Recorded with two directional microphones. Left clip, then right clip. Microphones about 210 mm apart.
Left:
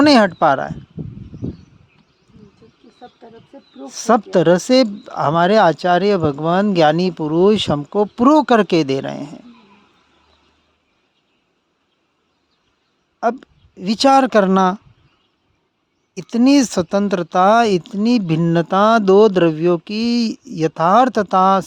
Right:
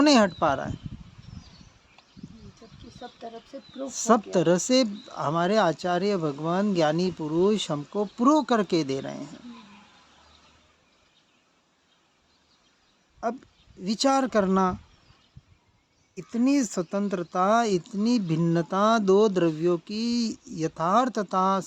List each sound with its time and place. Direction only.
0.0 s speech: 40° left (ahead or behind)
3.8 s speech: 40° left (ahead or behind)
13.1 s speech: 45° left (ahead or behind)
16.1 s speech: 50° left (ahead or behind)